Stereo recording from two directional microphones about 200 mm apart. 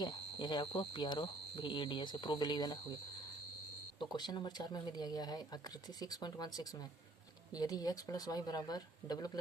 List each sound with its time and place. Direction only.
0.0 s speech: 20° left (ahead or behind)
4.1 s speech: 20° left (ahead or behind)